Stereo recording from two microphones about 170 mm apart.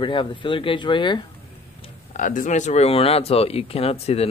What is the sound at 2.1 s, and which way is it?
Speech, 50° left (ahead or behind).